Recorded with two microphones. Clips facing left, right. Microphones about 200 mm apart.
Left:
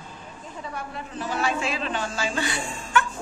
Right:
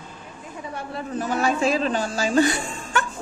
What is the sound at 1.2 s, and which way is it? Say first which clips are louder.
Speech: right 5 dB; 45° right (ahead or behind).